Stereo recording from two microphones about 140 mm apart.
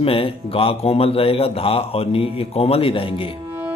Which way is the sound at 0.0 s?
40° left (ahead or behind).